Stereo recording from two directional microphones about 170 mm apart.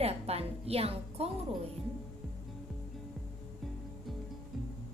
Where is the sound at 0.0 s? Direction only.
35° right (ahead or behind).